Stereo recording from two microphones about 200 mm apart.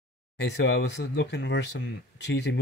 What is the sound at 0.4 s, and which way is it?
Speech, 60° left (ahead or behind).